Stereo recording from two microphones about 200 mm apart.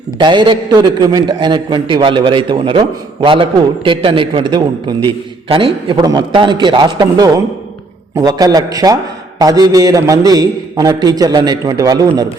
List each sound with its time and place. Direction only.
0.2 s a man's voice: 25° right (ahead or behind)